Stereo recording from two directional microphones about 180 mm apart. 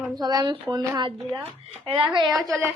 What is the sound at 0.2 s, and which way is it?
A woman's voice, 20° right (ahead or behind).